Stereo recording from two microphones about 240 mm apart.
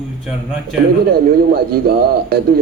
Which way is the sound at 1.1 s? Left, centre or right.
Right.